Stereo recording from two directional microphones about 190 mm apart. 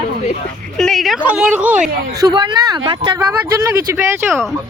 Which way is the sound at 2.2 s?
25° right (ahead or behind).